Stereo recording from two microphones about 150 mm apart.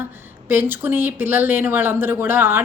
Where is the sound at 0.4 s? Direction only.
15° right (ahead or behind).